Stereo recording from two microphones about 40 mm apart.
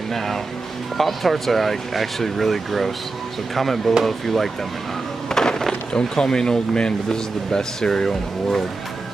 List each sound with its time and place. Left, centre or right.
0.9 s speech: centre
5.3 s a sound: centre
5.9 s speech: centre